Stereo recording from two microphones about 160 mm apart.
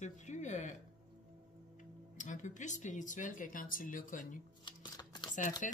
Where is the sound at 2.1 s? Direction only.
50° left (ahead or behind).